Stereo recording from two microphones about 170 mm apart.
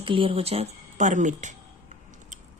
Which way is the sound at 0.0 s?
30° right (ahead or behind).